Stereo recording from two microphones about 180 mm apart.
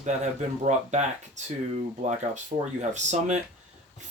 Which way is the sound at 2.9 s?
40° right (ahead or behind).